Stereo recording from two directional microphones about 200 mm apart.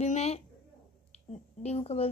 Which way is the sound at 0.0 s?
35° left (ahead or behind).